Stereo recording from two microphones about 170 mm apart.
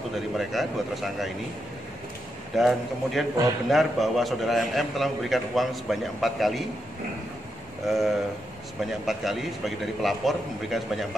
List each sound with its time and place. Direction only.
0.1 s a man's voice: centre (ahead or behind)
2.5 s a man's voice: centre (ahead or behind)
7.8 s a man's voice: centre (ahead or behind)